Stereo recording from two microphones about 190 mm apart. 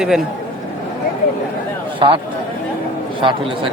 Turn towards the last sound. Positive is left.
turn(degrees=-25)  # may be behind; listen again after turning